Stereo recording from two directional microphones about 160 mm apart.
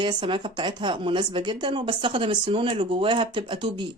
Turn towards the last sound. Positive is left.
turn(degrees=-30)  # may be behind; listen again after turning